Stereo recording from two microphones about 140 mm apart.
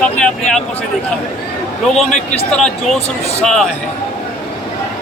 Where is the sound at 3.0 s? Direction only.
45° left (ahead or behind).